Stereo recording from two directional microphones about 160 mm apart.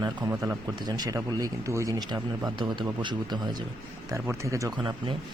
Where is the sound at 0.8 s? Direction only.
25° right (ahead or behind).